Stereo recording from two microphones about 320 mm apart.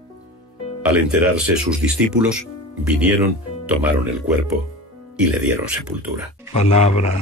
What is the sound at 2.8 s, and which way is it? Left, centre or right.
Speech, centre.